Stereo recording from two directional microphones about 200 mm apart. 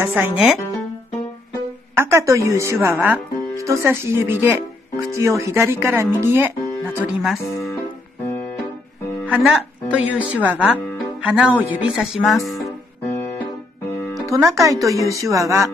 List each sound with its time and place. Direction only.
0.1 s speech: centre (ahead or behind)
2.0 s speech: 15° right (ahead or behind)
7.2 s speech: centre (ahead or behind)
9.3 s speech: centre (ahead or behind)
14.2 s speech: 15° right (ahead or behind)